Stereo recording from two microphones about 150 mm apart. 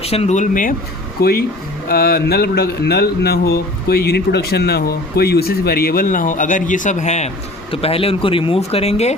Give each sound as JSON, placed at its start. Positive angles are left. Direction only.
{"t": 0.0, "sound": "speech", "side_deg": 45}
{"t": 1.2, "sound": "speech", "side_deg": 90}
{"t": 7.7, "sound": "speech", "side_deg": 40}